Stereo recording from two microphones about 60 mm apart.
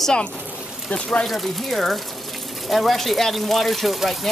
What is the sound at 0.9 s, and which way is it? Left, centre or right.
Speech, centre.